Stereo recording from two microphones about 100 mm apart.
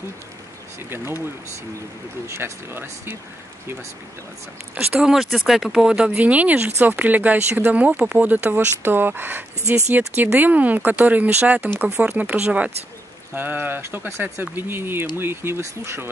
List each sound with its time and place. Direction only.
0.8 s speech: 25° right (ahead or behind)
2.2 s speech: 25° right (ahead or behind)
5.0 s speech: 5° right (ahead or behind); by 16.1 s 25° right (ahead or behind)